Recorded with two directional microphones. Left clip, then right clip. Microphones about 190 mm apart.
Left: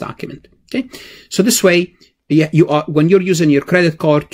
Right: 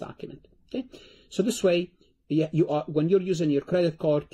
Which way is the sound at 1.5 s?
40° left (ahead or behind).